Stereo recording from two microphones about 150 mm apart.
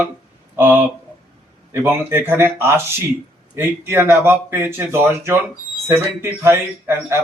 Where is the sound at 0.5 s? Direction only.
15° right (ahead or behind).